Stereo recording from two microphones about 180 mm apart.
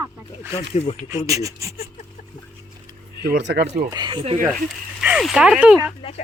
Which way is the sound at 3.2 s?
65° right (ahead or behind).